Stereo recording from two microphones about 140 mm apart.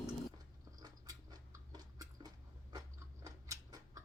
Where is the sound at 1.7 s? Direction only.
30° right (ahead or behind).